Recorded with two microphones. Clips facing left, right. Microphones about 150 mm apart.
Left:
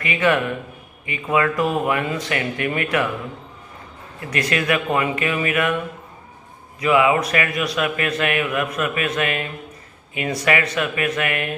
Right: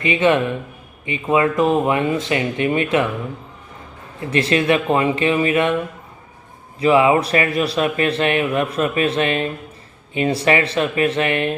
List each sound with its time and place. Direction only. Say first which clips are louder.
0.0 s speech: right 3 dB; 25° right (ahead or behind)
4.2 s speech: right 5 dB; 25° right (ahead or behind)
6.7 s speech: right 3 dB; 30° right (ahead or behind)